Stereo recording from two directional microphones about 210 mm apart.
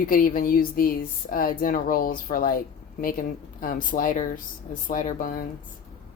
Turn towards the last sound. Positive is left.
turn(degrees=40)  # may be behind; listen again after turning